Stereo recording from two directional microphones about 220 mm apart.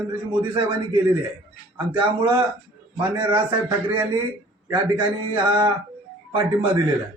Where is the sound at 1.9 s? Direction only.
20° right (ahead or behind).